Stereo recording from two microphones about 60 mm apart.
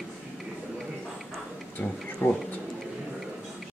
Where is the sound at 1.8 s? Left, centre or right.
Left.